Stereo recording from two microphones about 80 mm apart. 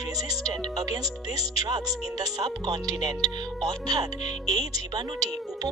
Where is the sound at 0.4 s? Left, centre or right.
Right.